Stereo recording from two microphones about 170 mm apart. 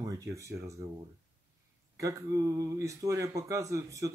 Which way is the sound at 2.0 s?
20° right (ahead or behind).